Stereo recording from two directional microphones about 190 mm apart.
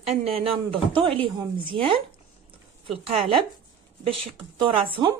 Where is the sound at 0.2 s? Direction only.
30° right (ahead or behind).